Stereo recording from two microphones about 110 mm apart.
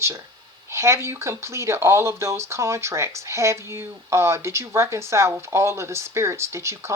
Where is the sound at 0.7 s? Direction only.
25° right (ahead or behind).